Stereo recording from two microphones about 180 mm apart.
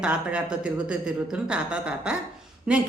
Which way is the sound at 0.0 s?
5° right (ahead or behind).